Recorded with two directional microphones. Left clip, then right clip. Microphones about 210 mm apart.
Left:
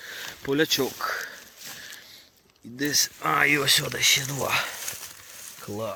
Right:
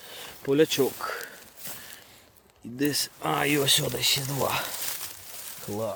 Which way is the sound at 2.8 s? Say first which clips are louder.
Left 3 dB; 15° right (ahead or behind).